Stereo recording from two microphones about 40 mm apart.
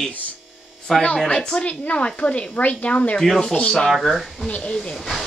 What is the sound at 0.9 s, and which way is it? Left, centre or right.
Speech, centre.